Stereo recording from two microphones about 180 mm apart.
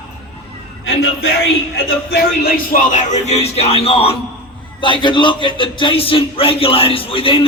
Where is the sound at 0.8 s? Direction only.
90° left.